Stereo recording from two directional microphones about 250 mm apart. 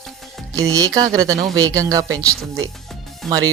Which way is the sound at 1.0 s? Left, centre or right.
Centre.